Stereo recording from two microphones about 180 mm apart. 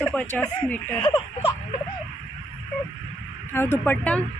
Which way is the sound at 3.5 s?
15° left (ahead or behind).